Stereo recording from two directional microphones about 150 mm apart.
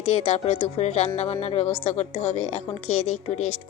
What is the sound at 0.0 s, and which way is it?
A woman's voice, 45° left (ahead or behind).